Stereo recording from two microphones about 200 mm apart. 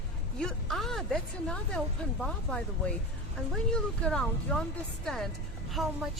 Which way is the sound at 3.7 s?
5° left (ahead or behind).